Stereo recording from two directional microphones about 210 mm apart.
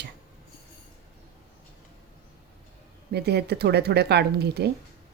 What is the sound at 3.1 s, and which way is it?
Speech, 50° right (ahead or behind).